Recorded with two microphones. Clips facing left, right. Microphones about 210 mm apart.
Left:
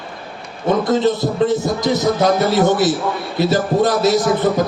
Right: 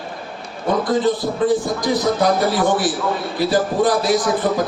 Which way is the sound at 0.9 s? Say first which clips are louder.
Left 2 dB; 25° left (ahead or behind).